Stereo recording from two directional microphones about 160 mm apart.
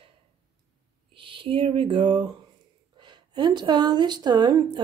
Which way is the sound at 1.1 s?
35° right (ahead or behind).